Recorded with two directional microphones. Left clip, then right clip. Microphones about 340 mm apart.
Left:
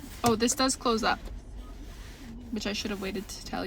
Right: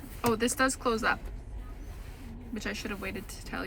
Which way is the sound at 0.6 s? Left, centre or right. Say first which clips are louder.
Left 1 dB; centre.